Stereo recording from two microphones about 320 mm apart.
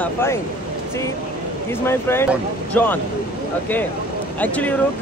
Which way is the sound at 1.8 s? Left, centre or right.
Centre.